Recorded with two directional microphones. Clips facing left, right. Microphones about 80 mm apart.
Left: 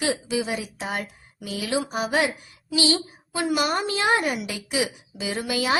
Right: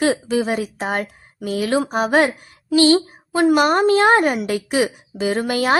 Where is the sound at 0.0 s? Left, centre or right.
Right.